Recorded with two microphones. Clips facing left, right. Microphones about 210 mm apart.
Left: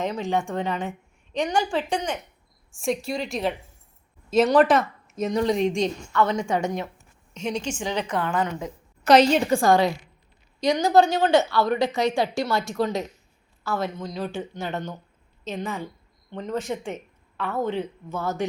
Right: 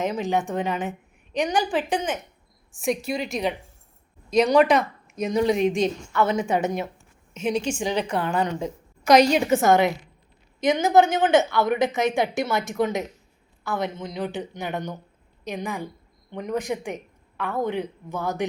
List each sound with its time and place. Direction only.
0.0 s a woman's voice: 15° right (ahead or behind)
1.9 s a woman's voice: 5° right (ahead or behind); by 8.7 s 25° right (ahead or behind)
9.0 s a woman's voice: 10° right (ahead or behind)